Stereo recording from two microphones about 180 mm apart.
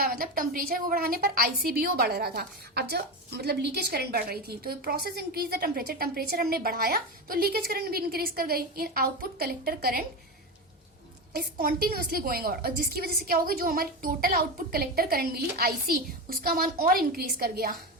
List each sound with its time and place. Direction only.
0.0 s a woman's voice: 55° right (ahead or behind)
11.9 s a woman's voice: 60° right (ahead or behind)